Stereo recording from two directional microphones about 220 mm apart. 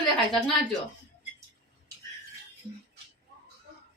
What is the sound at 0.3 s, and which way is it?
Speech, centre (ahead or behind).